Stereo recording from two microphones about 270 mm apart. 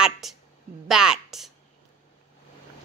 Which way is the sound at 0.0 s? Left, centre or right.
Centre.